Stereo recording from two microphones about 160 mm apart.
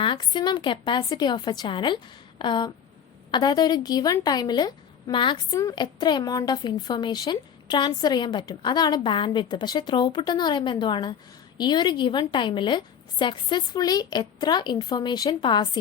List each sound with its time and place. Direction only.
0.0 s a woman's voice: 30° left (ahead or behind)